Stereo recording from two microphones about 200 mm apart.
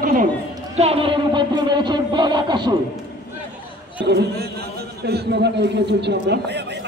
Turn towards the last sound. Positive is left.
turn(degrees=-60)  # may be behind; listen again after turning